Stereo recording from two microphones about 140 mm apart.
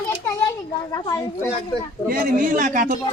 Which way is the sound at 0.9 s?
30° left (ahead or behind).